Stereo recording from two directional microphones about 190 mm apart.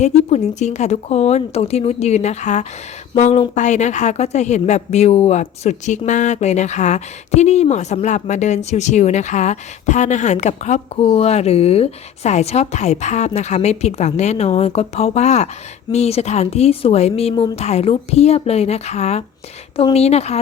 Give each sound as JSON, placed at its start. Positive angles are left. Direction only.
{"t": 0.0, "sound": "a woman's voice", "side_deg": 35}